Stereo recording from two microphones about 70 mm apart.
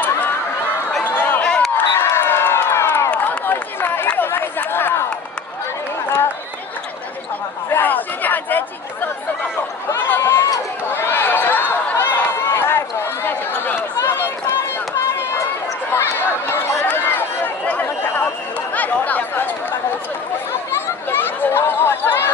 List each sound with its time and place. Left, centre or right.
1.4 s a sound: centre
1.8 s crowd: left
3.1 s run: left
7.7 s chatter: left
9.9 s a sound: left
14.0 s run: left
15.9 s run: left
17.6 s a sound: left
18.8 s chatter: left
20.7 s chatter: left